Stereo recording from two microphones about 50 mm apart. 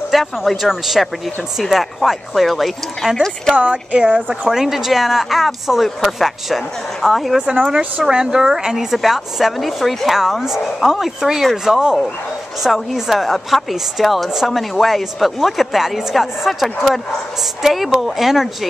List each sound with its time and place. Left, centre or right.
0.1 s a woman's voice: centre
3.5 s speech: right
4.5 s a woman's voice: centre
7.6 s a woman's voice: centre